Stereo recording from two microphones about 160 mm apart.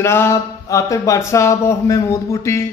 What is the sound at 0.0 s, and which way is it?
A man's voice, 15° left (ahead or behind).